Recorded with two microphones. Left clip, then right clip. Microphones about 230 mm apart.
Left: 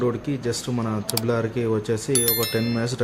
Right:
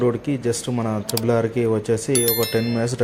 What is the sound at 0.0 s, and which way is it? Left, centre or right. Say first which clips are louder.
Speech: right 4 dB; centre.